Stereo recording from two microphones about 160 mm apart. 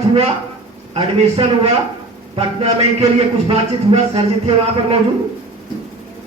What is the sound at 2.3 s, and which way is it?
A man's voice, 40° right (ahead or behind).